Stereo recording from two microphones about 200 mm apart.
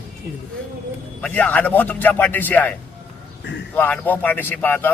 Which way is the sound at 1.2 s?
5° left (ahead or behind).